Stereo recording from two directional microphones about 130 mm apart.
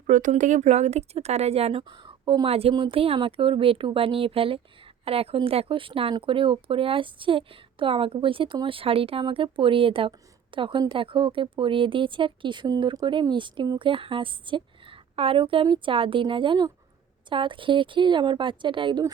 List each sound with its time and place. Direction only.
0.1 s speech: 80° right; by 1.8 s 50° right (ahead or behind)
1.8 s a woman's voice: 40° right (ahead or behind)